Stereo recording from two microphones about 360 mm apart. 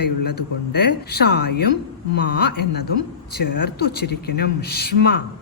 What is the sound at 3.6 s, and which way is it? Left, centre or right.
Speech, left.